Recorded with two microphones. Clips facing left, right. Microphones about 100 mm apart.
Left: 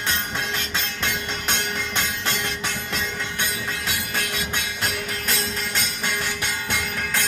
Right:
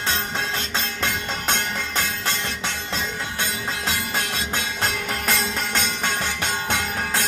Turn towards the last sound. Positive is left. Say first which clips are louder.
# right 3 dB
turn(degrees=-45)  # may be behind; listen again after turning